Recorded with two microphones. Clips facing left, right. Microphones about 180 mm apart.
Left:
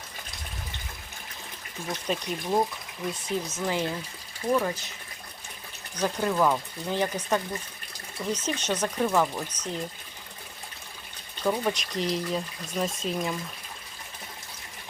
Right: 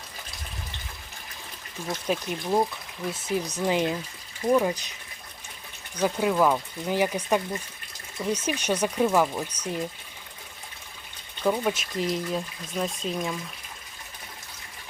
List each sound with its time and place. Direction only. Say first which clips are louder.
1.9 s speech: right 2 dB; 5° right (ahead or behind)
3.4 s speech: right 6 dB; 15° right (ahead or behind)
6.0 s speech: right 2 dB; 5° right (ahead or behind)
11.4 s speech: right 2 dB; 5° right (ahead or behind)